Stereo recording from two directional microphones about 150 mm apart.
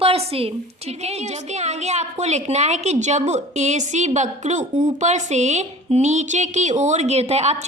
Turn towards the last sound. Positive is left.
turn(degrees=-45)  # may be behind; listen again after turning